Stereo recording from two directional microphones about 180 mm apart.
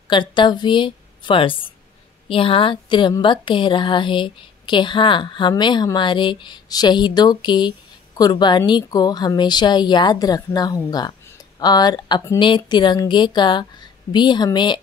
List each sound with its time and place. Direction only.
0.1 s a woman's voice: 25° left (ahead or behind)